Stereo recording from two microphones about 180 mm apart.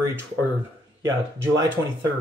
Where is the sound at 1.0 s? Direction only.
90° right.